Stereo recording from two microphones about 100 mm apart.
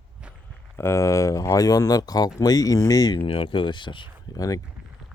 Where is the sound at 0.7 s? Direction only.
25° left (ahead or behind).